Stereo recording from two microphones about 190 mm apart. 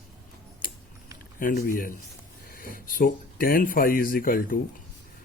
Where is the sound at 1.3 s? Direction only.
50° left (ahead or behind).